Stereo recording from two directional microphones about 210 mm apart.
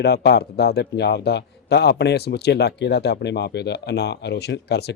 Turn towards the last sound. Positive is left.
turn(degrees=50)  # may be behind; listen again after turning